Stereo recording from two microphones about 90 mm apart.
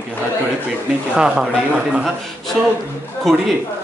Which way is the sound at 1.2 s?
10° right (ahead or behind).